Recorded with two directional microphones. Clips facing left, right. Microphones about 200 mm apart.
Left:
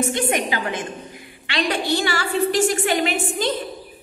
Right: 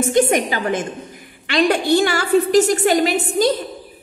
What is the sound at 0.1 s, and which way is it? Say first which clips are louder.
A woman's voice: right 6 dB; 45° right (ahead or behind).